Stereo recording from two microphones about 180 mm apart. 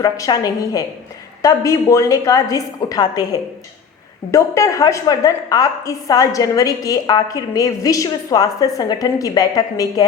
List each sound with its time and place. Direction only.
0.0 s a woman's voice: 20° left (ahead or behind)
4.3 s a woman's voice: 15° left (ahead or behind)